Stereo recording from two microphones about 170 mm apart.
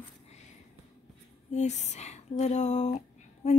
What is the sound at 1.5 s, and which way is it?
Speech, 40° left (ahead or behind).